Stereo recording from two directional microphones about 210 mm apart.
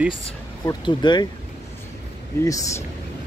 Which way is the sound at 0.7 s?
20° left (ahead or behind).